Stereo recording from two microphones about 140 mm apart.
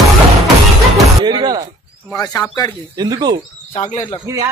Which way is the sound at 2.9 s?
30° right (ahead or behind).